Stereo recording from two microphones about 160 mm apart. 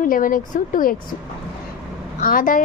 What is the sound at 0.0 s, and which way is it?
Speech, 60° left (ahead or behind).